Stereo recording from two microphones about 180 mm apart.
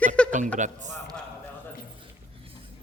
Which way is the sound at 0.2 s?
5° left (ahead or behind).